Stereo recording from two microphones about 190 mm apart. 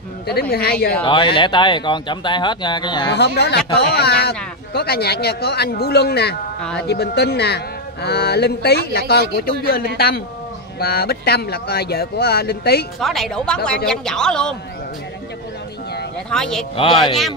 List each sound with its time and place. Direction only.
0.3 s speech: 55° left (ahead or behind)
1.0 s speech: 25° left (ahead or behind)
3.2 s speech: 60° left (ahead or behind)
13.0 s speech: centre (ahead or behind)
16.3 s speech: 5° left (ahead or behind)
16.7 s speech: 25° left (ahead or behind)